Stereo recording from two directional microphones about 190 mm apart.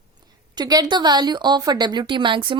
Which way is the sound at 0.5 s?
20° right (ahead or behind).